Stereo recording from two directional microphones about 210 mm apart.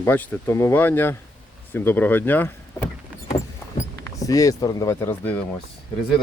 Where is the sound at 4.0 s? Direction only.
15° left (ahead or behind).